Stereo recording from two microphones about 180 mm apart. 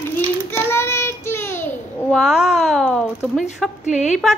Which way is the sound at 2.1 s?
5° right (ahead or behind).